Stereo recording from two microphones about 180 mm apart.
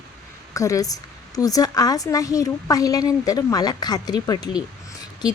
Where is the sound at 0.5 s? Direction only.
20° left (ahead or behind).